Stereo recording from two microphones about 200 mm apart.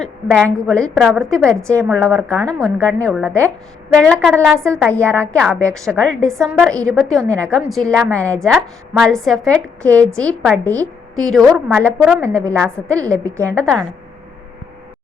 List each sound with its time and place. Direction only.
0.3 s a woman's voice: 5° left (ahead or behind)
13.0 s a woman's voice: 15° right (ahead or behind)
13.6 s a woman's voice: 5° left (ahead or behind)